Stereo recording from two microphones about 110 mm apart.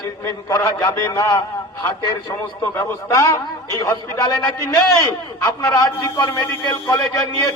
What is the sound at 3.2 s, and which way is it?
A man's voice, 30° left (ahead or behind).